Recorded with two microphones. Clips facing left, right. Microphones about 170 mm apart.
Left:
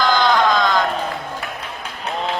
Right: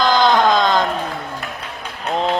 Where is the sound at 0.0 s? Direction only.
20° right (ahead or behind).